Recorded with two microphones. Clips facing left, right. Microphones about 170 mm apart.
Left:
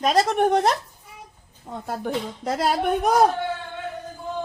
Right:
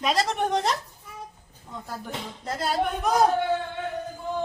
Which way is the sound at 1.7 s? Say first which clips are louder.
Left 5 dB; 85° left.